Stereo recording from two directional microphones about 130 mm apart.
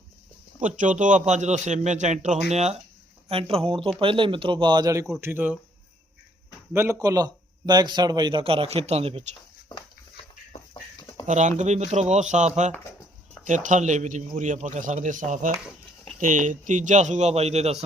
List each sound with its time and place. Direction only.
0.6 s a man's voice: 75° right (ahead or behind); by 2.7 s 60° right (ahead or behind)
3.2 s a man's voice: 45° right (ahead or behind); by 5.0 s 30° right (ahead or behind)
5.2 s speech: 15° right (ahead or behind)
6.7 s a man's voice: 25° right (ahead or behind); by 9.2 s 50° right (ahead or behind)
11.3 s a man's voice: 70° right (ahead or behind)